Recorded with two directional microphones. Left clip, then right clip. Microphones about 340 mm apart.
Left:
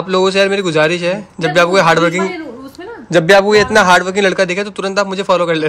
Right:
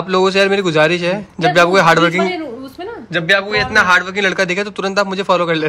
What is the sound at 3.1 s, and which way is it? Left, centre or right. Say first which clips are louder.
A man's voice: left 6 dB; centre.